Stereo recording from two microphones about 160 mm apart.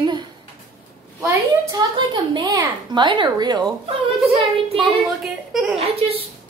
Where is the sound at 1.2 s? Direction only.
25° right (ahead or behind).